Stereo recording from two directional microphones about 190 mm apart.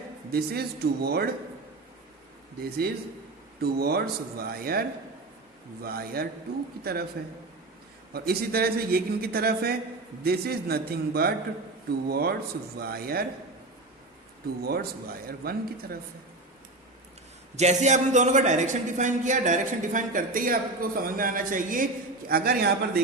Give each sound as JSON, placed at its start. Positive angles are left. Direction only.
{"t": 0.3, "sound": "speech", "side_deg": -55}
{"t": 2.6, "sound": "a man's voice", "side_deg": -55}
{"t": 8.1, "sound": "a man's voice", "side_deg": -55}
{"t": 14.6, "sound": "a man's voice", "side_deg": -55}
{"t": 17.6, "sound": "a man's voice", "side_deg": -35}